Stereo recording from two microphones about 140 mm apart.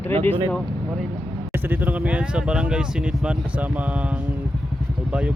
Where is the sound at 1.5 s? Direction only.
15° right (ahead or behind).